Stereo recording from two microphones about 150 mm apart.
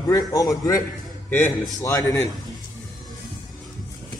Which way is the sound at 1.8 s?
20° left (ahead or behind).